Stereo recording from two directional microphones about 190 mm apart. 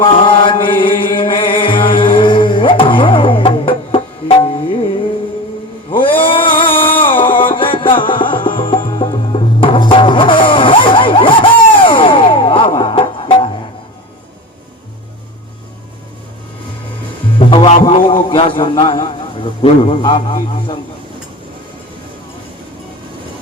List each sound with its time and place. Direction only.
0.0 s chant: 25° left (ahead or behind)
0.8 s music: 25° left (ahead or behind)
5.9 s a sound: 25° left (ahead or behind)
6.6 s music: 30° left (ahead or behind)
17.5 s music: 30° left (ahead or behind)
17.8 s a man's voice: 30° left (ahead or behind)